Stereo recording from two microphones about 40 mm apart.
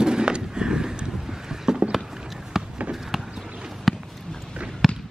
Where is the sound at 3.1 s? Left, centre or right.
Centre.